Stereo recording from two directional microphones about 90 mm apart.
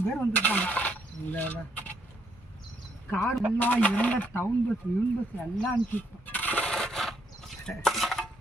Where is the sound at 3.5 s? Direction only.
15° left (ahead or behind).